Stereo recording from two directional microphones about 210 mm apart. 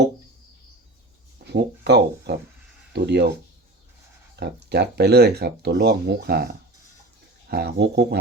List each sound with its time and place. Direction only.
1.5 s speech: 50° right (ahead or behind)
4.4 s speech: 50° right (ahead or behind)